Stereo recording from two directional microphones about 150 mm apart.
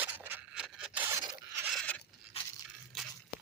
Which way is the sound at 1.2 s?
20° right (ahead or behind).